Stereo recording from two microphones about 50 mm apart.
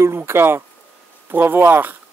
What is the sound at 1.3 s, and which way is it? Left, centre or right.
Speech, right.